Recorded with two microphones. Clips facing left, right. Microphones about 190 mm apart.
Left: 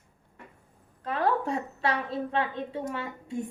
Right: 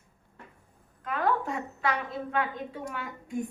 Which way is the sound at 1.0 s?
30° left (ahead or behind).